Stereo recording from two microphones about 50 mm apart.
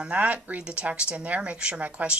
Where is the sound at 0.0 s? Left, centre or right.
Right.